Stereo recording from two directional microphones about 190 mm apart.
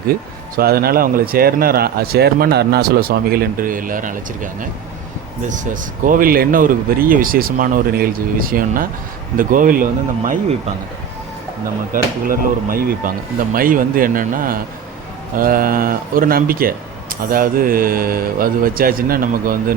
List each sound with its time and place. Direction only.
0.5 s speech: 55° right (ahead or behind)
5.5 s speech: 45° right (ahead or behind)
11.9 s speech: 50° right (ahead or behind)